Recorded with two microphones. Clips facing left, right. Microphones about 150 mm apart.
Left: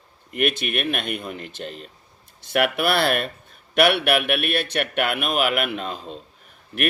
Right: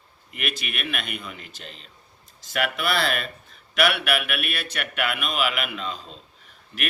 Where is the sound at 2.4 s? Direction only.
60° left (ahead or behind).